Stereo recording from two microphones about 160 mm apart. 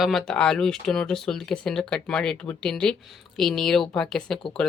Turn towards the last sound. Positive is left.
turn(degrees=5)  # may be behind; listen again after turning